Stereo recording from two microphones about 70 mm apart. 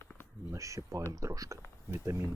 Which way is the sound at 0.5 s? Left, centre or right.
Right.